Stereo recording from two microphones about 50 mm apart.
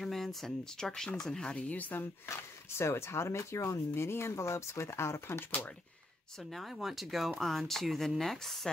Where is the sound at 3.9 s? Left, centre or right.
Left.